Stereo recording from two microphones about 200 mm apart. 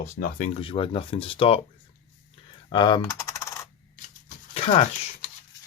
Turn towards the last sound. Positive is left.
turn(degrees=30)  # may be behind; listen again after turning